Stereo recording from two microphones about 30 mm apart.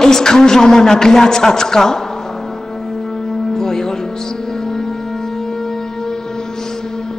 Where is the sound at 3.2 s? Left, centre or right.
Centre.